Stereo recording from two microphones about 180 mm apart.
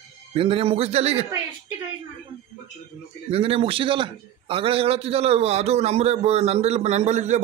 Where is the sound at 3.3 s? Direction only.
30° right (ahead or behind).